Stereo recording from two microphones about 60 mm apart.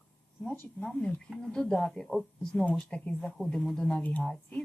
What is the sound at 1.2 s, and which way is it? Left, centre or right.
A woman's voice, centre.